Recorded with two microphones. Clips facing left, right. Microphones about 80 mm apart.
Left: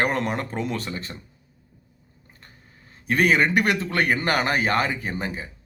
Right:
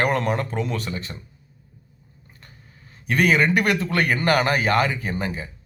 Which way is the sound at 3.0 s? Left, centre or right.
Left.